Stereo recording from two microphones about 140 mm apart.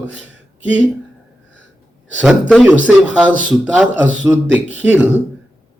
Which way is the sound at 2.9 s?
10° right (ahead or behind).